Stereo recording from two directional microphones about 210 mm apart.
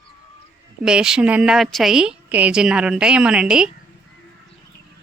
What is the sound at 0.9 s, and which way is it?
A woman's voice, 5° right (ahead or behind).